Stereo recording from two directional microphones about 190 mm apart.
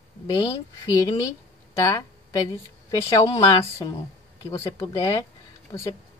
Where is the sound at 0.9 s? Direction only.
20° left (ahead or behind).